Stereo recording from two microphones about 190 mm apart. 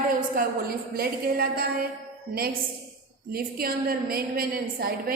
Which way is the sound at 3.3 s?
50° right (ahead or behind).